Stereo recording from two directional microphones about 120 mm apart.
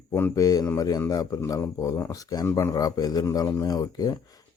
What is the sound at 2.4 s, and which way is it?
Speech, 20° left (ahead or behind).